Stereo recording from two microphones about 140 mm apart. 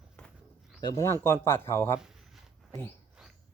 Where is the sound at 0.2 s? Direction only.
5° left (ahead or behind).